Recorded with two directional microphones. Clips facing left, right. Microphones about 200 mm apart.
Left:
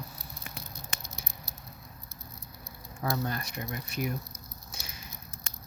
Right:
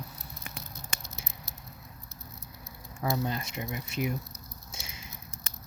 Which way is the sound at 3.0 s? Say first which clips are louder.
Right 1 dB; 20° right (ahead or behind).